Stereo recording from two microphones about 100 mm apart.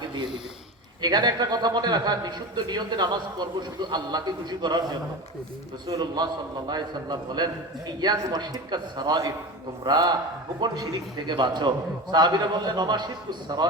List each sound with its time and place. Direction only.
1.0 s a man's voice: 45° right (ahead or behind)